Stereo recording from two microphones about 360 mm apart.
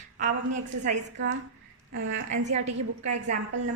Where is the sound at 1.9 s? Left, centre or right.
Right.